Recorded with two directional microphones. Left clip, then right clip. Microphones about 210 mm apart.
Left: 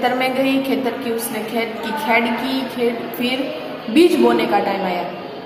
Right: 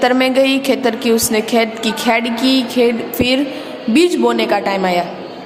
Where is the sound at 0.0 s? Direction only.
55° right (ahead or behind).